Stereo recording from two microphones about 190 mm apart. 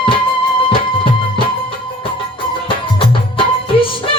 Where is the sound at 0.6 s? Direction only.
30° left (ahead or behind).